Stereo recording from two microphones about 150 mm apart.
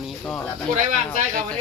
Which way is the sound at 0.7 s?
60° right (ahead or behind).